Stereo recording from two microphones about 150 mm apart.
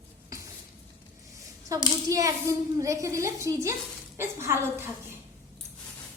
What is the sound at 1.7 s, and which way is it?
A child's voice, 20° right (ahead or behind).